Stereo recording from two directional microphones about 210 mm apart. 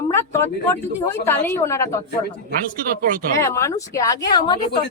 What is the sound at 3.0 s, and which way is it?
Speech, 40° right (ahead or behind).